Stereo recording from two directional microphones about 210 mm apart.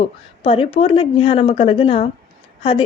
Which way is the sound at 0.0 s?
25° left (ahead or behind).